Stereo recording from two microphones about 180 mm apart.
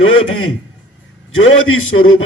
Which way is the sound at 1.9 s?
90° left.